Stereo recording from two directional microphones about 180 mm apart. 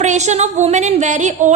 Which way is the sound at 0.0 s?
40° right (ahead or behind).